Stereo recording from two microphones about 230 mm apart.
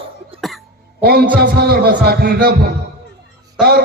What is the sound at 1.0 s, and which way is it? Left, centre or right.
A man's voice, right.